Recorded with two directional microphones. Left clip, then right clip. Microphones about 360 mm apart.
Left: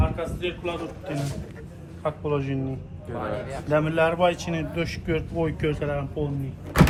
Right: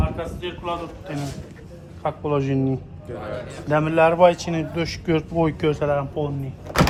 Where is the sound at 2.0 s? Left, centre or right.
Right.